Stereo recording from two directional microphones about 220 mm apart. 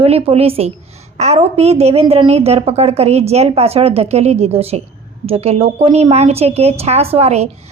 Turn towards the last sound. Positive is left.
turn(degrees=-30)  # may be behind; listen again after turning